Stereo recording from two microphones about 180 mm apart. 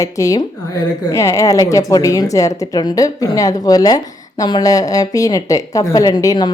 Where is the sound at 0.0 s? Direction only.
20° left (ahead or behind).